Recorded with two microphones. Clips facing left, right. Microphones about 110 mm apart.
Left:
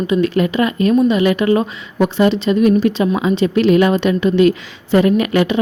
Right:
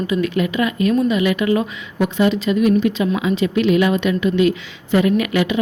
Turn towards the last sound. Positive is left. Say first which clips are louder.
# left 3 dB
turn(degrees=40)  # may be behind; listen again after turning